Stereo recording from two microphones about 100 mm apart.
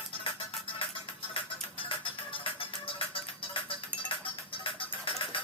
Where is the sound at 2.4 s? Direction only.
60° left (ahead or behind).